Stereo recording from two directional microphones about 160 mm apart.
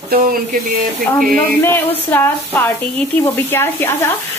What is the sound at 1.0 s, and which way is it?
Speech, 15° left (ahead or behind).